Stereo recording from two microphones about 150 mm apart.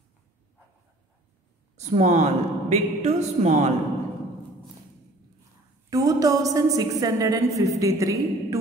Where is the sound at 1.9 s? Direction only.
50° right (ahead or behind).